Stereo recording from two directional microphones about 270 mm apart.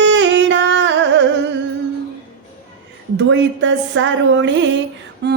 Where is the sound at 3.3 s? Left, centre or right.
Right.